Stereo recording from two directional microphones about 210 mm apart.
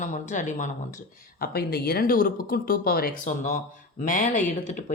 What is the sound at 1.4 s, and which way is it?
Speech, 45° left (ahead or behind).